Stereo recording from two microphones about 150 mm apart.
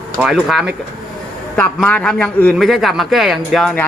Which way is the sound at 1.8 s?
5° left (ahead or behind).